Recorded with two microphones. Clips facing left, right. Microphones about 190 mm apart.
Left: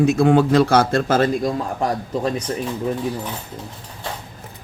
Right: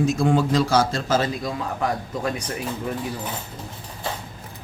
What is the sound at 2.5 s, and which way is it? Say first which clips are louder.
Speech: left 5 dB; 30° left (ahead or behind).